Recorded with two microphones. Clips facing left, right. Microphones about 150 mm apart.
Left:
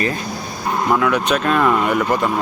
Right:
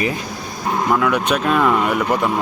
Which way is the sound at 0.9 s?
Centre (ahead or behind).